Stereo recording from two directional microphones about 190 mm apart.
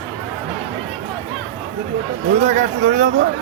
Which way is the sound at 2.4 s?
40° right (ahead or behind).